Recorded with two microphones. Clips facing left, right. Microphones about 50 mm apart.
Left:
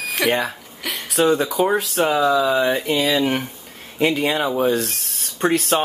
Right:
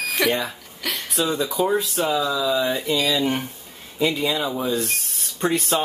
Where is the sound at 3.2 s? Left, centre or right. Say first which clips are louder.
Left 2 dB; left.